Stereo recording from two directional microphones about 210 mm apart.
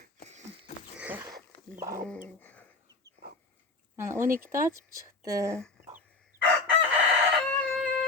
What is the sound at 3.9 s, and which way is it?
Speech, 10° right (ahead or behind).